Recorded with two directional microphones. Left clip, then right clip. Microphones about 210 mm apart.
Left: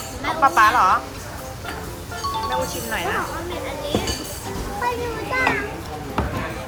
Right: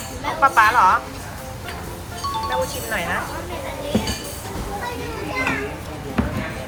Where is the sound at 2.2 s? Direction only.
Centre (ahead or behind).